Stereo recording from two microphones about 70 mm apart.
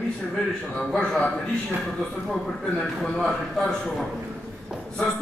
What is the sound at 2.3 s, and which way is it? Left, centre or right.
A man's voice, centre.